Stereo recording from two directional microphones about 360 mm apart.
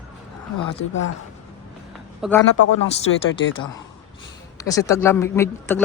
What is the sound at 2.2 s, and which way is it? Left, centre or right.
Speech, centre.